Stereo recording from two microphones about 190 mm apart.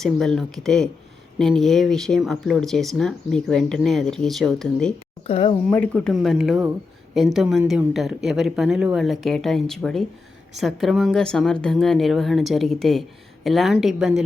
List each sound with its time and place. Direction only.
0.0 s speech: centre (ahead or behind)
5.2 s speech: 30° left (ahead or behind)
5.7 s speech: 5° left (ahead or behind)